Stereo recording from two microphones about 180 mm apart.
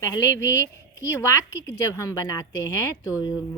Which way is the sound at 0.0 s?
15° left (ahead or behind).